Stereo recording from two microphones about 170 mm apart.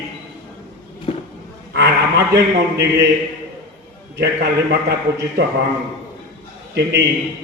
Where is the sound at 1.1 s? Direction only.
35° left (ahead or behind).